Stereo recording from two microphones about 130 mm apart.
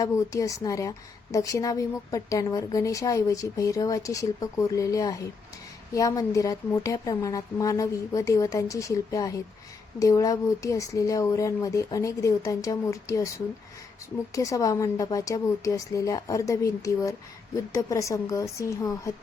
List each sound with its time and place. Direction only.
0.0 s a woman's voice: 25° left (ahead or behind)
14.3 s a woman's voice: 25° left (ahead or behind)